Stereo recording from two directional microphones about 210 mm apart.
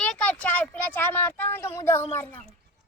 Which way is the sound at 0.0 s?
5° left (ahead or behind).